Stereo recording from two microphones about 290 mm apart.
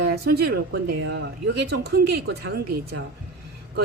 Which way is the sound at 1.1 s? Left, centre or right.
Right.